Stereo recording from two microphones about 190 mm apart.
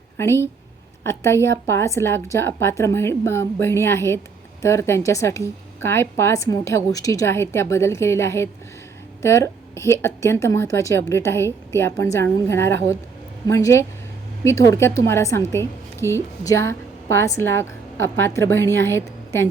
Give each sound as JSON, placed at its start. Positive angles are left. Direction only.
{"t": 0.2, "sound": "a woman's voice", "side_deg": 15}